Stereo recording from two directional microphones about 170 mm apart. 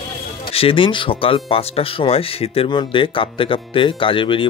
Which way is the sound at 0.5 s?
30° left (ahead or behind).